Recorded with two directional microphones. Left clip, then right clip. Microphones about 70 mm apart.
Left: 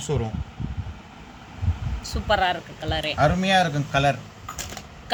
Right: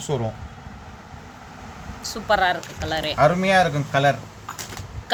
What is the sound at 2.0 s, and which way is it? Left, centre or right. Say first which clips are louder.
Speech: right 2 dB; centre.